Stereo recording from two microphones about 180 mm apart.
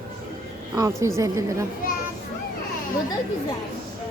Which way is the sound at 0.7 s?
15° right (ahead or behind).